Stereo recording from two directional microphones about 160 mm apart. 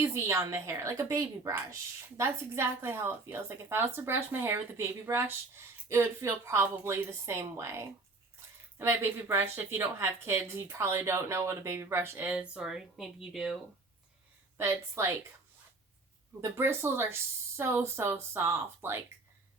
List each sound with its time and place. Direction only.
0.0 s a woman's voice: 15° right (ahead or behind)
14.6 s a woman's voice: 15° right (ahead or behind)
16.4 s a woman's voice: 15° right (ahead or behind)